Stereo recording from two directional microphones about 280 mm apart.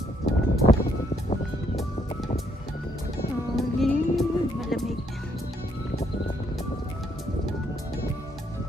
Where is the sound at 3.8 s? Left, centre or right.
Centre.